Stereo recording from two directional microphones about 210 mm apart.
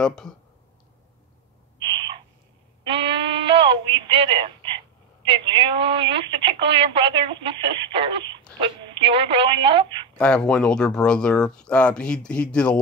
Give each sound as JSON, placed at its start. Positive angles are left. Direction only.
{"t": 0.0, "sound": "speech", "side_deg": 5}
{"t": 1.8, "sound": "owl", "side_deg": -20}
{"t": 2.8, "sound": "sheep", "side_deg": -25}
{"t": 8.5, "sound": "a woman's voice", "side_deg": -20}
{"t": 10.1, "sound": "speech", "side_deg": 5}